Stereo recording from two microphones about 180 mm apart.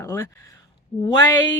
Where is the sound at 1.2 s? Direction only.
20° left (ahead or behind).